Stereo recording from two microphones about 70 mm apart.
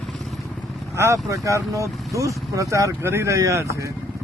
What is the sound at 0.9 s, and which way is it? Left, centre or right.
Speech, right.